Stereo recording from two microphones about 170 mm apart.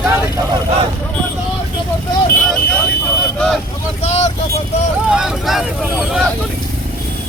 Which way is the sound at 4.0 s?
40° left (ahead or behind).